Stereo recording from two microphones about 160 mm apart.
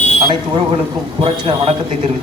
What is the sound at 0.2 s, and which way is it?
Speech, 30° right (ahead or behind).